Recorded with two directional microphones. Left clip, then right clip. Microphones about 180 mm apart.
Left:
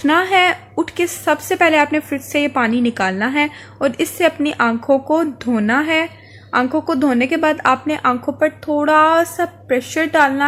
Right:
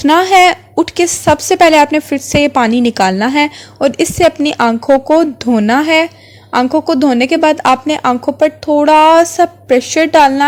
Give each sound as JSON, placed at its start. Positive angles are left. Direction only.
{"t": 0.0, "sound": "a woman's voice", "side_deg": -40}
{"t": 6.7, "sound": "a woman's voice", "side_deg": -30}